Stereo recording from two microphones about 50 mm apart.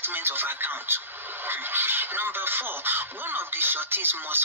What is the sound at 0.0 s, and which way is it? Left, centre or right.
Speech, right.